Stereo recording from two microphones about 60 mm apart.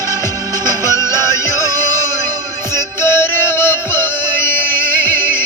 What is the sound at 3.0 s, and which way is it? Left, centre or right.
Music, left.